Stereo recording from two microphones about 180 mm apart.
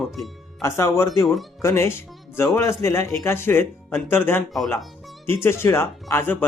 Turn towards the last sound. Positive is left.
turn(degrees=15)  # may be behind; listen again after turning